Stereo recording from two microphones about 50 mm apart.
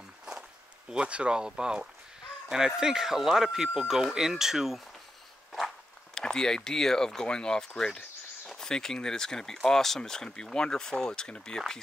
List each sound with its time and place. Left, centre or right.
0.2 s a sound: centre
2.5 s speech: centre
6.1 s speech: centre